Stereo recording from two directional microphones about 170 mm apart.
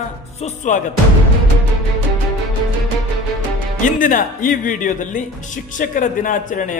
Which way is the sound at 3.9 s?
50° left (ahead or behind).